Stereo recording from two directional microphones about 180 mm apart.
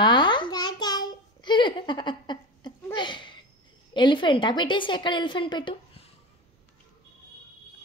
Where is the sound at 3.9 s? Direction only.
25° left (ahead or behind).